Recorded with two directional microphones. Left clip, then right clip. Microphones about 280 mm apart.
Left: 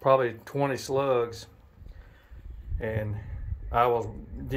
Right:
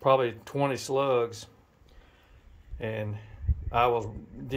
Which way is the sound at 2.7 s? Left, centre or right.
Centre.